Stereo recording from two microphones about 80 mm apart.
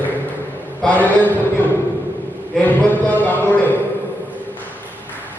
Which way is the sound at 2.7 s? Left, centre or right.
Left.